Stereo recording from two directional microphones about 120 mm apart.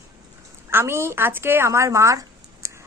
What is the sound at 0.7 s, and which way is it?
A woman's voice, 20° right (ahead or behind).